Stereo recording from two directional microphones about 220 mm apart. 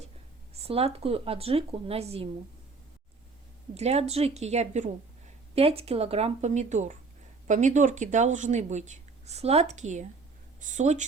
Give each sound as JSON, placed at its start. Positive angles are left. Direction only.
{"t": 0.6, "sound": "speech", "side_deg": -25}
{"t": 3.8, "sound": "speech", "side_deg": -30}